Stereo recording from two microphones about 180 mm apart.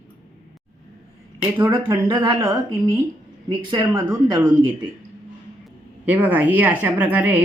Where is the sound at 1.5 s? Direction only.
15° right (ahead or behind).